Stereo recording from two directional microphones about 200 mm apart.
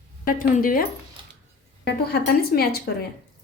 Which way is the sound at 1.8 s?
50° left (ahead or behind).